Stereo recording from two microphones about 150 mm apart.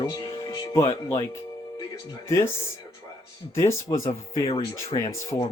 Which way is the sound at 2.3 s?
15° left (ahead or behind).